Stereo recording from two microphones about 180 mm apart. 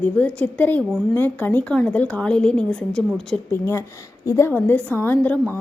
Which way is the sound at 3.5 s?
15° left (ahead or behind).